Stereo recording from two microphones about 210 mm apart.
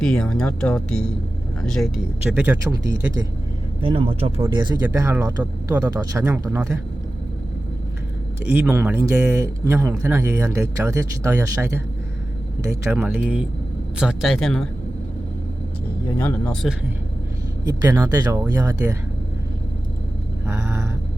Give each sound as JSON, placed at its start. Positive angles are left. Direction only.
{"t": 0.0, "sound": "speech", "side_deg": 5}
{"t": 3.8, "sound": "speech", "side_deg": -25}
{"t": 8.5, "sound": "speech", "side_deg": -10}
{"t": 16.1, "sound": "speech", "side_deg": 5}
{"t": 17.7, "sound": "speech", "side_deg": -20}
{"t": 20.5, "sound": "a sound", "side_deg": -10}